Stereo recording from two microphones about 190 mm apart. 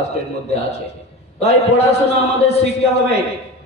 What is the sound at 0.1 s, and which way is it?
A man's voice, 35° left (ahead or behind).